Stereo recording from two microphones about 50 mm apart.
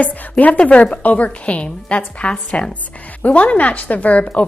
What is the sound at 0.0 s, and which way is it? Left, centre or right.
A woman's voice, left.